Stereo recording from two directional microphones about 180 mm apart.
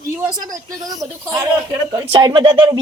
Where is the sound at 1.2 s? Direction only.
15° right (ahead or behind).